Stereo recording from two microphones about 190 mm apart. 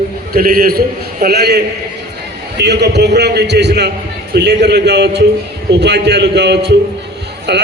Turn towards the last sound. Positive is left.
turn(degrees=-60)  # may be behind; listen again after turning